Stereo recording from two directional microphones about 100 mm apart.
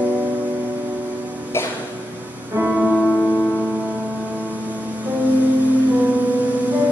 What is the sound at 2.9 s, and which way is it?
Music, 5° left (ahead or behind).